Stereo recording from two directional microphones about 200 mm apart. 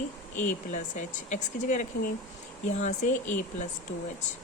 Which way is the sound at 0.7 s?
35° left (ahead or behind).